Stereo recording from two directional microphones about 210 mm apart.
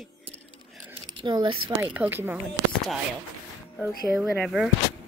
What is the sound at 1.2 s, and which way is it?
Speech, 20° right (ahead or behind).